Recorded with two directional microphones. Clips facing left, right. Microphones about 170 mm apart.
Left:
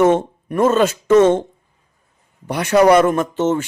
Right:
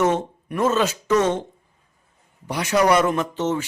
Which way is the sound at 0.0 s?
50° left (ahead or behind).